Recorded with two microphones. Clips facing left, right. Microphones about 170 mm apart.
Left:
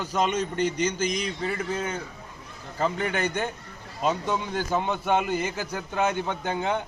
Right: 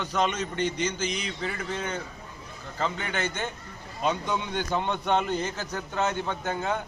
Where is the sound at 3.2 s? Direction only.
15° left (ahead or behind).